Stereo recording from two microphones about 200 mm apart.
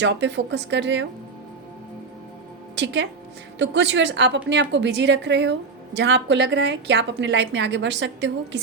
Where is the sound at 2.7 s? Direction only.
60° right (ahead or behind).